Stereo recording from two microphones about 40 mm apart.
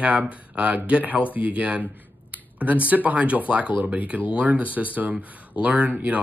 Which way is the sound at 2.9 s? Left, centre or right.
Right.